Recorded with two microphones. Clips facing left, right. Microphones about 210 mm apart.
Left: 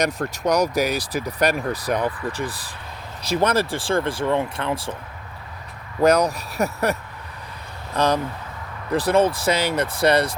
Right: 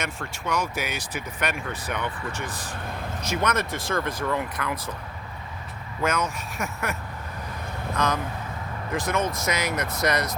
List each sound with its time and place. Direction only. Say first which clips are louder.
0.0 s speech: left 10 dB; 40° left (ahead or behind)
6.0 s speech: left 9 dB; 35° left (ahead or behind)
7.9 s speech: left 6 dB; 30° left (ahead or behind)